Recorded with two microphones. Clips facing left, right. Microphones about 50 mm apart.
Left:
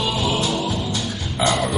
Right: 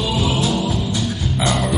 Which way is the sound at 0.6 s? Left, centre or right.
Right.